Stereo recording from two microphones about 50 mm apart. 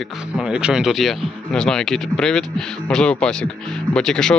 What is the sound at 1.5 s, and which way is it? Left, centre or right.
Speech, centre.